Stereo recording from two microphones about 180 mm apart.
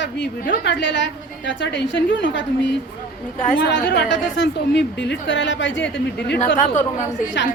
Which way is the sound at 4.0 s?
90° left.